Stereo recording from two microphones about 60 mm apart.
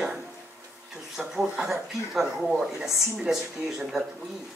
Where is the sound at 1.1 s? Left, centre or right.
Centre.